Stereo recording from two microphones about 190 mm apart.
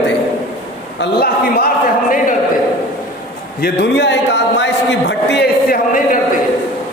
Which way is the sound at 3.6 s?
55° left (ahead or behind).